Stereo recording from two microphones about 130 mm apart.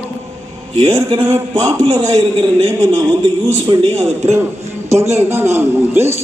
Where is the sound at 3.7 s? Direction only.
40° right (ahead or behind).